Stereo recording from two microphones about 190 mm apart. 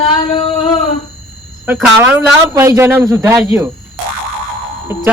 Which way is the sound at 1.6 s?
10° right (ahead or behind).